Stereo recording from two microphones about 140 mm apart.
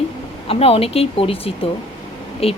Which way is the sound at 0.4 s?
45° left (ahead or behind).